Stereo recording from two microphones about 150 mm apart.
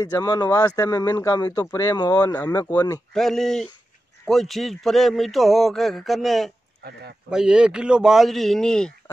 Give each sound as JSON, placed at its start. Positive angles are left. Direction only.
{"t": 0.0, "sound": "speech", "side_deg": 25}
{"t": 2.7, "sound": "speech", "side_deg": 15}
{"t": 3.1, "sound": "speech", "side_deg": 5}
{"t": 6.8, "sound": "a man's voice", "side_deg": -90}
{"t": 7.2, "sound": "speech", "side_deg": -5}